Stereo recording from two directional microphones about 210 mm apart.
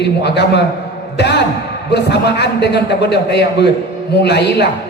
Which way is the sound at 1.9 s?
55° left (ahead or behind).